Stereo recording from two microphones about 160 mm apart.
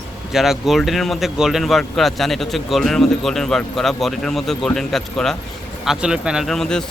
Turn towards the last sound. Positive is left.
turn(degrees=5)  # may be behind; listen again after turning